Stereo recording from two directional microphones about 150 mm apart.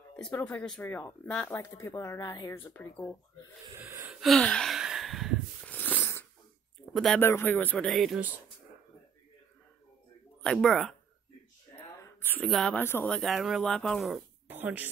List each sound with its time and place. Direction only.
0.1 s speech: 10° left (ahead or behind); by 2.5 s 25° left (ahead or behind)
2.5 s speech: 15° left (ahead or behind)
3.7 s gasp: 15° right (ahead or behind)
4.1 s gasp: centre (ahead or behind)
5.7 s a sound: 10° left (ahead or behind)
6.9 s speech: centre (ahead or behind)
7.2 s speech: 15° left (ahead or behind)
10.4 s speech: 5° left (ahead or behind)
12.0 s a sound: 15° left (ahead or behind)
12.4 s speech: centre (ahead or behind)
12.7 s speech: 15° left (ahead or behind)
13.1 s speech: centre (ahead or behind)
14.5 s speech: 10° right (ahead or behind)